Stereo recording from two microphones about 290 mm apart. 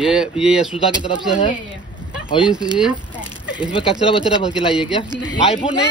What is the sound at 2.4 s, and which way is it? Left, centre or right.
Speech, centre.